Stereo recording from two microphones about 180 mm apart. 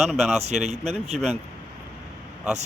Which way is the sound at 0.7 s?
35° right (ahead or behind).